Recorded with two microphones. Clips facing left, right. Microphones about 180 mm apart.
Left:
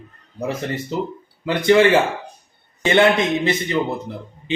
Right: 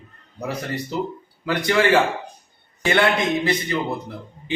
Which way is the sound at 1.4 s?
20° left (ahead or behind).